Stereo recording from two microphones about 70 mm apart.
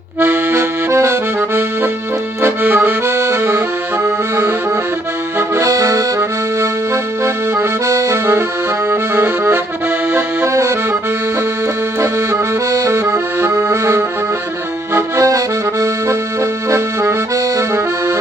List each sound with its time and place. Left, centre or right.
0.2 s accordion: right
5.5 s accordion: right
8.9 s accordion: right
11.9 s accordion: right
14.9 s accordion: right